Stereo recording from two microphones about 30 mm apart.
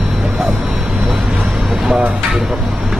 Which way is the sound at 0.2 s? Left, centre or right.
Centre.